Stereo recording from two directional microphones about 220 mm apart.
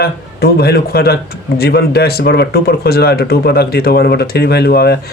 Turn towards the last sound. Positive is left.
turn(degrees=45)  # may be behind; listen again after turning